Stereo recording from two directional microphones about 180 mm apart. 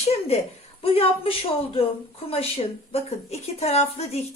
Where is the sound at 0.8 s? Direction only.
30° left (ahead or behind).